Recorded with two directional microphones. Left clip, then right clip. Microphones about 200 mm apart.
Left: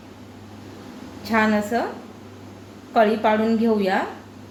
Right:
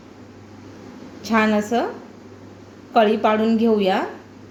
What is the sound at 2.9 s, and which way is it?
Speech, 30° right (ahead or behind).